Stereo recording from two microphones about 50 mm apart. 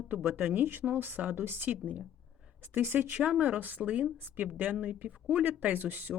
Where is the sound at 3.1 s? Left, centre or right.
Right.